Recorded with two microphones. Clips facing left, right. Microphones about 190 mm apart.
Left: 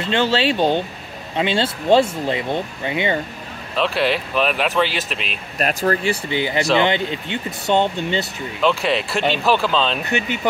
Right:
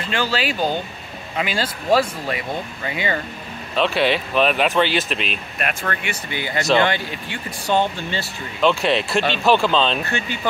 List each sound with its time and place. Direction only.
0.0 s speech: 25° left (ahead or behind)
3.7 s speech: centre (ahead or behind)
5.6 s speech: 35° left (ahead or behind)
6.8 s speech: 20° left (ahead or behind)
8.6 s speech: centre (ahead or behind)
10.0 s speech: 20° left (ahead or behind)